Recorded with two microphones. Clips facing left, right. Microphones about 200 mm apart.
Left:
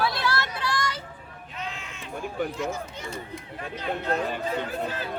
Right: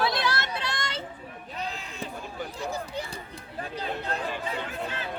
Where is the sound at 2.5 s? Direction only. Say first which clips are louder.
Left 1 dB; 35° right (ahead or behind).